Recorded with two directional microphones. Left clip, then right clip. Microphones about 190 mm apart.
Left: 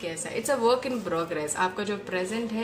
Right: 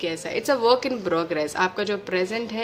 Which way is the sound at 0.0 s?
35° right (ahead or behind).